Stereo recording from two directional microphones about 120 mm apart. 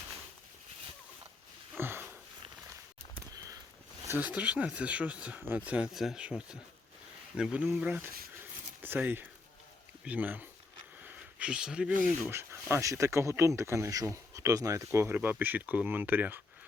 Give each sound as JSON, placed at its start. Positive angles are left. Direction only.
{"t": 1.8, "sound": "sniff", "side_deg": -20}
{"t": 3.3, "sound": "sniff", "side_deg": -30}
{"t": 4.2, "sound": "speech", "side_deg": -10}
{"t": 11.0, "sound": "a sound", "side_deg": -15}
{"t": 12.3, "sound": "speech", "side_deg": -20}